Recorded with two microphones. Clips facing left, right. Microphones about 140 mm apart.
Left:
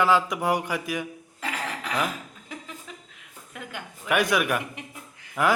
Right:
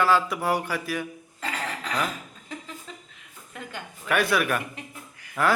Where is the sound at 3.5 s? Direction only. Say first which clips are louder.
Even; 10° left (ahead or behind).